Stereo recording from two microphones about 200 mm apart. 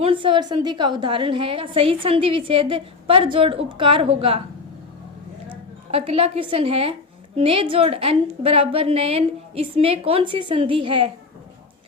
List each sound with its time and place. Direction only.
0.0 s a woman's voice: 25° right (ahead or behind)
5.9 s a woman's voice: 30° right (ahead or behind)